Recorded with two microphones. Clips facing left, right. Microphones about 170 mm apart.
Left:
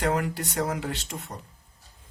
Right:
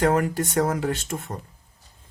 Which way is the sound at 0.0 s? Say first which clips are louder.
Right 5 dB; 50° right (ahead or behind).